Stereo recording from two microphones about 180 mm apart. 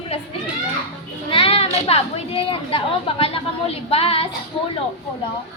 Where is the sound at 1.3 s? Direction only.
30° left (ahead or behind).